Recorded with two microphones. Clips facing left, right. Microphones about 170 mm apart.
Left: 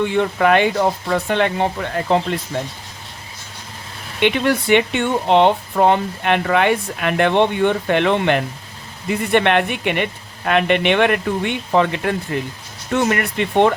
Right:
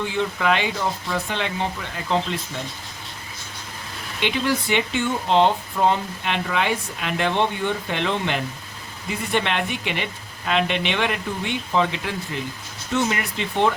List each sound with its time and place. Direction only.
0.0 s speech: 60° left (ahead or behind)
4.2 s speech: 60° left (ahead or behind)